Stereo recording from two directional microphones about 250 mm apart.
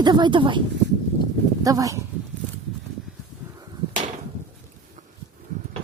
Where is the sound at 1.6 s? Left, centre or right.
Centre.